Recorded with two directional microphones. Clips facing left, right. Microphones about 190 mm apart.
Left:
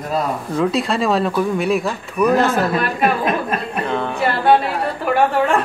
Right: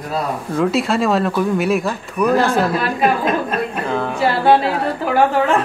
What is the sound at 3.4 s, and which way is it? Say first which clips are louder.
Chuckle: right 1 dB; centre (ahead or behind).